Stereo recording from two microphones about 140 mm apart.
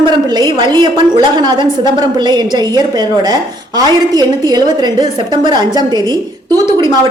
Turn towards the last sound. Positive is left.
turn(degrees=-35)  # may be behind; listen again after turning